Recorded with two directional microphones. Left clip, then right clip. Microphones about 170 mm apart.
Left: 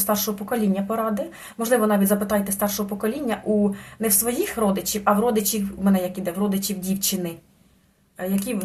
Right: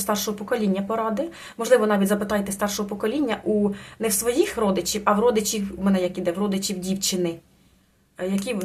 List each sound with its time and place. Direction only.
0.0 s speech: 15° right (ahead or behind)